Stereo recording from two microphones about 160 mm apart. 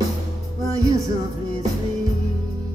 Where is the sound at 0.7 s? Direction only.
20° right (ahead or behind).